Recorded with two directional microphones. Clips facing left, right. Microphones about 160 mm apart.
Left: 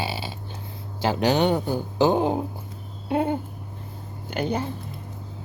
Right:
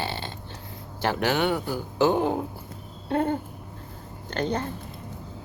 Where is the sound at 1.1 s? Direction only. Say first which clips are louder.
Left 4 dB; 20° left (ahead or behind).